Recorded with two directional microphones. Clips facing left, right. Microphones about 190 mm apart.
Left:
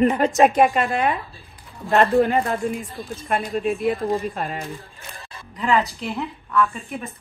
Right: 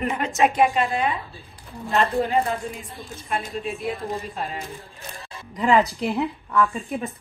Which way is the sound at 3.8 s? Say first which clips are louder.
Left 7 dB; 55° left (ahead or behind).